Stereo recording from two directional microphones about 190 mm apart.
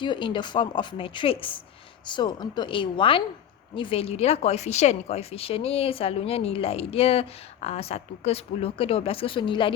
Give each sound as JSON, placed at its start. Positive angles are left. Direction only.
{"t": 0.0, "sound": "a woman's voice", "side_deg": 25}